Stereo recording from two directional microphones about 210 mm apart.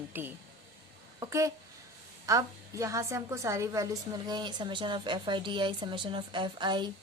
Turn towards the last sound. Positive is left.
turn(degrees=-20)  # may be behind; listen again after turning